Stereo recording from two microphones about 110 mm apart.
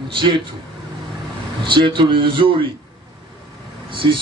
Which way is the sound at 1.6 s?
50° right (ahead or behind).